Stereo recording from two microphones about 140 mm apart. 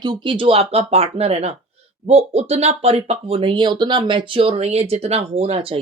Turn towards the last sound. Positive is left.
turn(degrees=-45)  # may be behind; listen again after turning